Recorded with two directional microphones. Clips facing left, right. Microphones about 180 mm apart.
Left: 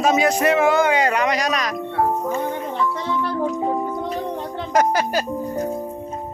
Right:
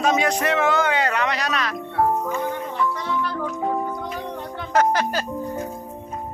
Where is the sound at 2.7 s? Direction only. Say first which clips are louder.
Left 1 dB; 25° left (ahead or behind).